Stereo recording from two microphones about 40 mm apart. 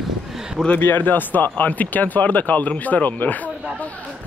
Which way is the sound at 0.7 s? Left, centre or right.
Left.